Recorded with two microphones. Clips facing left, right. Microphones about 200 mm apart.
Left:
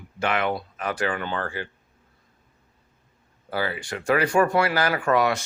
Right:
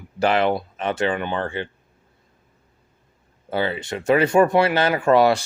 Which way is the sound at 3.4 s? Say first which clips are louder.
Right 4 dB; 25° right (ahead or behind).